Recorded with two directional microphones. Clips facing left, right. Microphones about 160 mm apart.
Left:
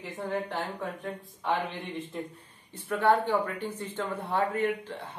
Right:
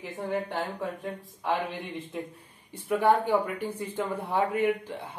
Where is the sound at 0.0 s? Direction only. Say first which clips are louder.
Right 1 dB; 10° right (ahead or behind).